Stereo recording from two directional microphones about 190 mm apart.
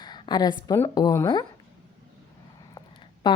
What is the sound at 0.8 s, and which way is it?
Speech, 15° left (ahead or behind).